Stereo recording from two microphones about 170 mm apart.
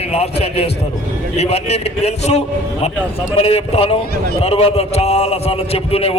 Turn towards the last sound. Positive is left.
turn(degrees=35)  # may be behind; listen again after turning